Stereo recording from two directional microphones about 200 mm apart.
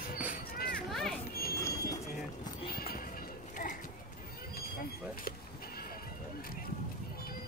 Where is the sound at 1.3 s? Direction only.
50° left (ahead or behind).